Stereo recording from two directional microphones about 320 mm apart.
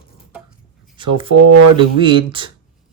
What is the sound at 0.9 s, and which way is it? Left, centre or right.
Speech, centre.